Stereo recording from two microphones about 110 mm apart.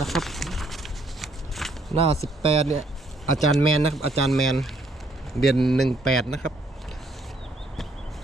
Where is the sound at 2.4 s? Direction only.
70° right (ahead or behind).